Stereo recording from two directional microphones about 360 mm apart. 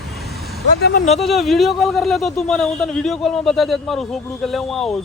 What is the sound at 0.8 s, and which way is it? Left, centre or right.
Speech, left.